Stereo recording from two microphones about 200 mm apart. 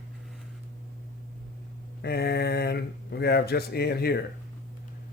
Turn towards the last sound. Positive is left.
turn(degrees=50)  # may be behind; listen again after turning